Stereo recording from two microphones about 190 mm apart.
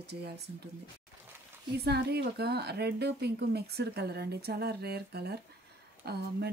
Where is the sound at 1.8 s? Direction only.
60° right (ahead or behind).